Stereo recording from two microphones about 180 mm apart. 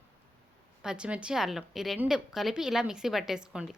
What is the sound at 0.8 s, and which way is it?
A woman's voice, 5° right (ahead or behind).